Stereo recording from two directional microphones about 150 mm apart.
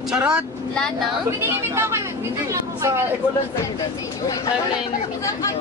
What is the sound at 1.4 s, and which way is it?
A woman's voice, 15° right (ahead or behind).